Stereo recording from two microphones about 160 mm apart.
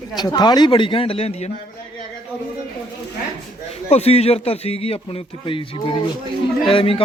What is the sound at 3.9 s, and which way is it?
A man's voice, 40° left (ahead or behind).